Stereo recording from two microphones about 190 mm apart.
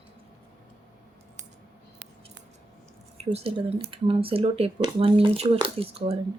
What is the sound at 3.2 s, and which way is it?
Speech, 30° right (ahead or behind).